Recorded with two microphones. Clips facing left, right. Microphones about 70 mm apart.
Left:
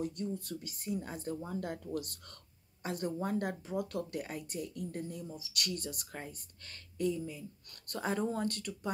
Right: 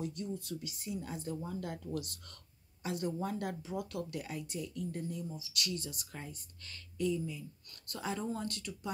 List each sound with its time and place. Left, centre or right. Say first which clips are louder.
0.0 s speech: left 2 dB; left
5.4 s speech: left 1 dB; left
6.1 s speech: left 2 dB; left